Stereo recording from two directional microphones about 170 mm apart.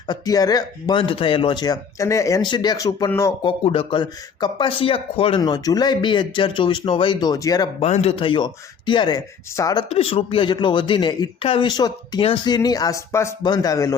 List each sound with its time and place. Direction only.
0.1 s speech: 20° left (ahead or behind)
3.4 s speech: 30° left (ahead or behind)
5.4 s speech: 25° left (ahead or behind)
7.8 s speech: 40° left (ahead or behind); by 9.8 s 20° left (ahead or behind)
9.9 s speech: 35° left (ahead or behind)